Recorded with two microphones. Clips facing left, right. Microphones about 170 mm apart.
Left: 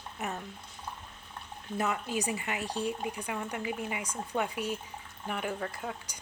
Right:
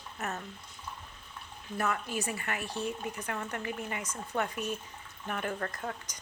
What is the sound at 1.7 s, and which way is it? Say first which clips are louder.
Speech: left 1 dB; 15° left (ahead or behind).